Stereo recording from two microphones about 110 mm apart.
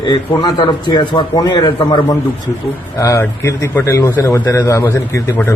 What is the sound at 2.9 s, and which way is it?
Speech, 20° left (ahead or behind).